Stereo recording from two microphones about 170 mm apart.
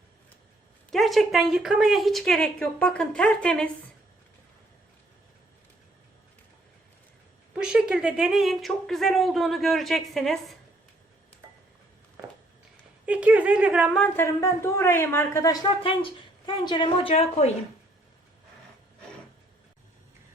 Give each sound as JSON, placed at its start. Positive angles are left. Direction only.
{"t": 0.9, "sound": "speech", "side_deg": 0}
{"t": 7.5, "sound": "speech", "side_deg": -5}
{"t": 13.1, "sound": "speech", "side_deg": -10}
{"t": 14.0, "sound": "speech", "side_deg": 15}